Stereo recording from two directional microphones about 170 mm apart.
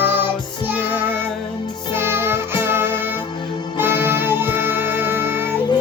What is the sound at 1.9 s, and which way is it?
Music, 15° right (ahead or behind).